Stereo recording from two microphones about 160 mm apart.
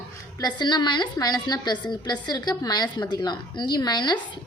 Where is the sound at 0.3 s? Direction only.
25° left (ahead or behind).